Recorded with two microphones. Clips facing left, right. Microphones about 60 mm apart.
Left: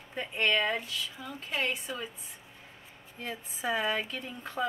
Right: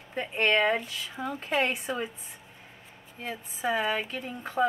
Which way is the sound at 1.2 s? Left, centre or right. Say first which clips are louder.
Right 9 dB; right.